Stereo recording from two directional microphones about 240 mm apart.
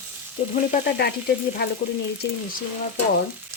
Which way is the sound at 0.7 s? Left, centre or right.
Left.